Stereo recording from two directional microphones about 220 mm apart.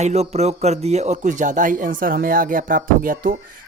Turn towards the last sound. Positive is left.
turn(degrees=-40)  # may be behind; listen again after turning